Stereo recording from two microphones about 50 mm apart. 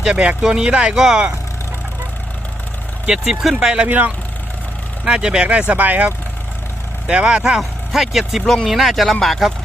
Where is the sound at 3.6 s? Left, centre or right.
Centre.